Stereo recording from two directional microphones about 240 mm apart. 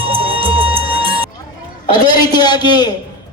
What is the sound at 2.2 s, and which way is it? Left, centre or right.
Speech, centre.